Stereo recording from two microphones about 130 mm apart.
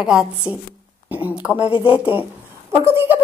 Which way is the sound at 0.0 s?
5° right (ahead or behind).